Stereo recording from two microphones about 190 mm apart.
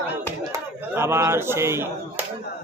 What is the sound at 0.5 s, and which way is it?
Speech, 15° right (ahead or behind).